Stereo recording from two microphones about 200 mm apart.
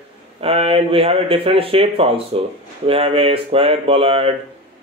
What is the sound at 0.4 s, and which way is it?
Speech, 30° right (ahead or behind).